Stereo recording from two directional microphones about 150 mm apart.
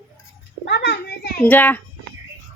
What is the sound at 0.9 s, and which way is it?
Speech, 90° left.